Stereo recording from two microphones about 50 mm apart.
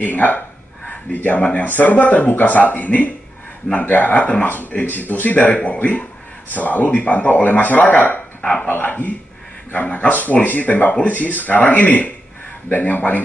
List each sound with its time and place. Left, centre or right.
0.0 s speech: left
8.4 s dog: centre
8.8 s speech: left